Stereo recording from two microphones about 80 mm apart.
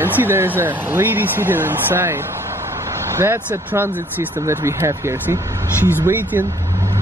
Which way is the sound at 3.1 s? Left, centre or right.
Right.